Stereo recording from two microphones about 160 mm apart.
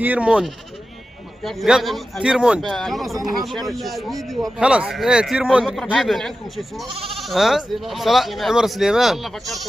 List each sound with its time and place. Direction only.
0.0 s a man's voice: 10° right (ahead or behind)
6.9 s speech: 35° right (ahead or behind)
7.2 s a man's voice: centre (ahead or behind)